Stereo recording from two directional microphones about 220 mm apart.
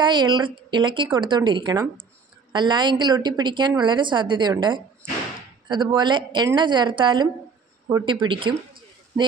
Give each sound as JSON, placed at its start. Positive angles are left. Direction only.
{"t": 0.0, "sound": "a woman's voice", "side_deg": -20}